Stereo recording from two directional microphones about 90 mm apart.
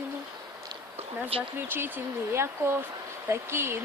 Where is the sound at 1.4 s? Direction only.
25° right (ahead or behind).